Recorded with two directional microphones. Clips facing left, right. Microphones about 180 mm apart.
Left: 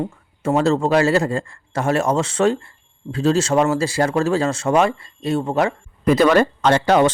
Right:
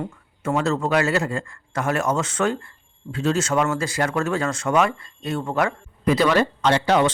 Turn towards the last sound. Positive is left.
turn(degrees=45)  # may be behind; listen again after turning